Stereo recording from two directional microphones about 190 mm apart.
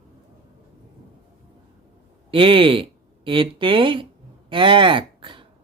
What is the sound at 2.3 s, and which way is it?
Speech, 25° right (ahead or behind).